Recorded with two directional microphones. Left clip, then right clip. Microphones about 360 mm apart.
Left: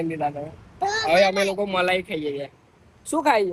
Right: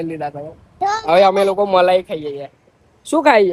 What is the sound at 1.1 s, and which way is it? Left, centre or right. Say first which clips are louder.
Speech: right 7 dB; centre.